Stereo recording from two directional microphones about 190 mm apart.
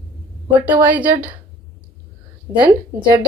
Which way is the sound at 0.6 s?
10° right (ahead or behind).